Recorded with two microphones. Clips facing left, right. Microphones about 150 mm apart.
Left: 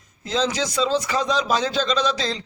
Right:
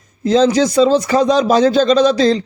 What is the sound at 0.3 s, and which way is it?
A man's voice, 45° right (ahead or behind).